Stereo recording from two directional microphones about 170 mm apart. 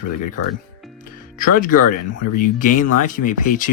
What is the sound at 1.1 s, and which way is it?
Music, 55° left (ahead or behind).